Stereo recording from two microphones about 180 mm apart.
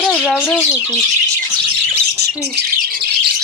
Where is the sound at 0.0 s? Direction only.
10° left (ahead or behind).